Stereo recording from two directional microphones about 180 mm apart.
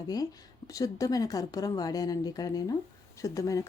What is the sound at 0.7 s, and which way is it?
A woman's voice, 20° left (ahead or behind).